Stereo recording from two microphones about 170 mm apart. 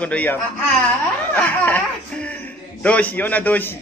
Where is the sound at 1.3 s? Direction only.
10° left (ahead or behind).